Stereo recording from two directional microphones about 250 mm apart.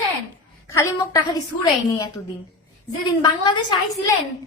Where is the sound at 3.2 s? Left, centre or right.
Centre.